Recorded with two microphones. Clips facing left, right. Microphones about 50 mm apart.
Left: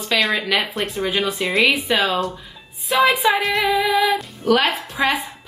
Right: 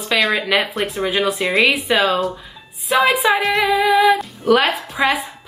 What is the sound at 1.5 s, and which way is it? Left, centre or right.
Speech, centre.